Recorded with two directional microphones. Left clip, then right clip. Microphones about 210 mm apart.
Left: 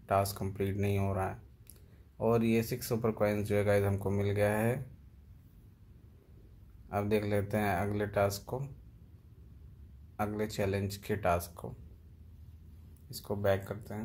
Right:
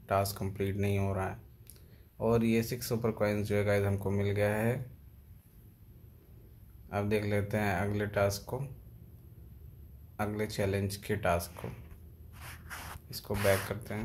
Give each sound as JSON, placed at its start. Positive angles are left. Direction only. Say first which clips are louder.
{"t": 0.0, "sound": "speech", "louder": "even", "side_deg": 5}
{"t": 6.9, "sound": "speech", "louder": "even", "side_deg": 5}
{"t": 10.1, "sound": "speech", "louder": "even", "side_deg": 0}
{"t": 13.1, "sound": "speech", "louder": "right 2 dB", "side_deg": 0}